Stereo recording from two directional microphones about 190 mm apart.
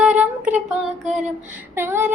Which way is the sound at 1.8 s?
10° right (ahead or behind).